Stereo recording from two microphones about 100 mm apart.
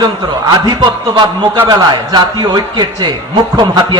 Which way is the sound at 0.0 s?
45° right (ahead or behind).